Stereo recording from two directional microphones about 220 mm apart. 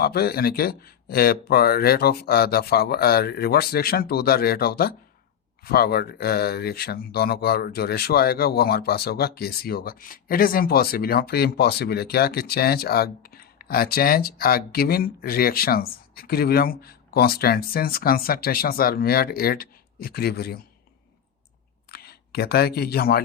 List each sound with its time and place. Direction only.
0.0 s speech: 45° left (ahead or behind)
21.8 s speech: 45° left (ahead or behind)